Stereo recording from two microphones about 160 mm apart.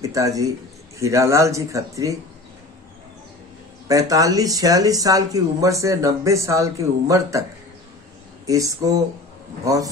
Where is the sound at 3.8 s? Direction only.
20° right (ahead or behind).